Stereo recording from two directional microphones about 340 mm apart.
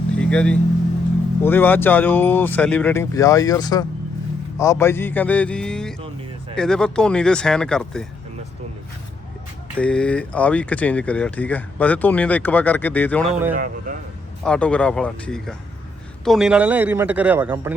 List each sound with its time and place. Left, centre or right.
0.2 s a man's voice: centre
9.7 s speech: centre
13.5 s speech: right
14.4 s speech: centre